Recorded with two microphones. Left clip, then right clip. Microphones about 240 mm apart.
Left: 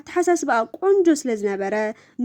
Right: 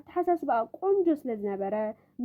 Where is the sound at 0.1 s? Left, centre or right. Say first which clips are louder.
Left 7 dB; left.